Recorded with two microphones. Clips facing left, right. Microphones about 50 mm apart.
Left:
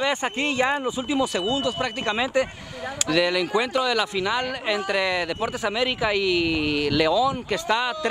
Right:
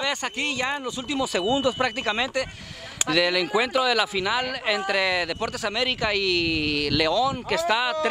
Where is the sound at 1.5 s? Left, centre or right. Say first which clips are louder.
Right 2 dB; centre.